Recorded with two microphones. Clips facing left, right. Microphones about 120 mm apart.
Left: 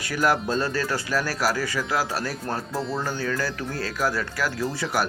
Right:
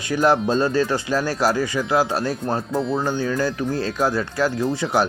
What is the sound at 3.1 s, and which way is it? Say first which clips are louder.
Speech: right 5 dB; 20° right (ahead or behind).